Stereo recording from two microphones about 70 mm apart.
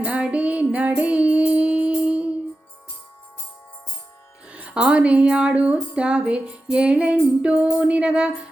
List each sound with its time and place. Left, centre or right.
0.0 s music: centre
4.4 s speech: centre